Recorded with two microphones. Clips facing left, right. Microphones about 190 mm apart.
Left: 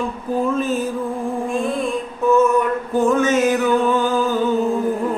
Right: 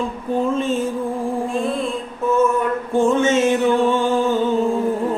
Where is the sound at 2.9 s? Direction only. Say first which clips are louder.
Even; 25° right (ahead or behind).